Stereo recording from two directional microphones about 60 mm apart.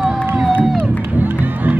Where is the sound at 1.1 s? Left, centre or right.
Right.